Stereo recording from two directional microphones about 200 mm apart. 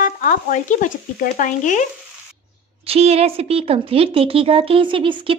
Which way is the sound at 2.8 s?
30° right (ahead or behind).